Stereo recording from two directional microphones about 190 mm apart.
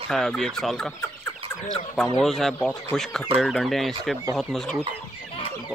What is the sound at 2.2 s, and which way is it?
Speech, centre (ahead or behind).